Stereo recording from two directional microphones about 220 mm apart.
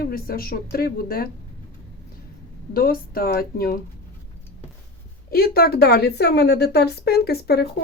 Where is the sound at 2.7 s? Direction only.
40° left (ahead or behind).